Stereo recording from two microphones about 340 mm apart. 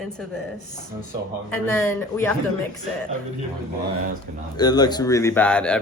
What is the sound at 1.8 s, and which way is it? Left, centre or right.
Speech, centre.